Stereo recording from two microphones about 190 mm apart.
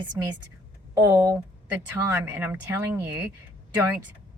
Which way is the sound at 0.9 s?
15° right (ahead or behind).